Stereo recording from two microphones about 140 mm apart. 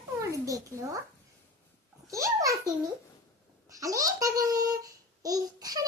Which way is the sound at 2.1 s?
25° right (ahead or behind).